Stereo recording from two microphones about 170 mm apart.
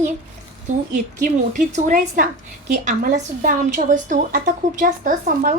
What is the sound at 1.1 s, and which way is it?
A woman's voice, 50° right (ahead or behind).